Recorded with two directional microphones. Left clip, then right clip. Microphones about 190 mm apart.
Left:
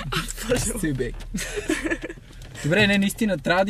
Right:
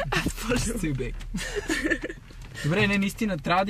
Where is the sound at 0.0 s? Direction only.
35° right (ahead or behind).